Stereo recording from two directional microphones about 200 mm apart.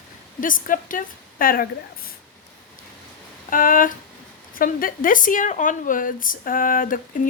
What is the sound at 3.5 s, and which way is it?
A woman's voice, 45° left (ahead or behind).